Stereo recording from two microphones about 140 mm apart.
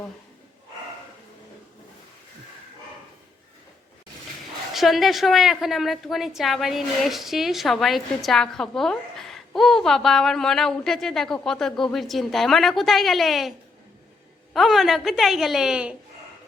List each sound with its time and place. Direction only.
4.7 s a woman's voice: centre (ahead or behind)
14.5 s a woman's voice: centre (ahead or behind)